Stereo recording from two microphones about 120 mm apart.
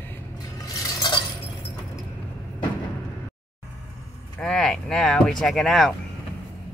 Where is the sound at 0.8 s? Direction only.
35° left (ahead or behind).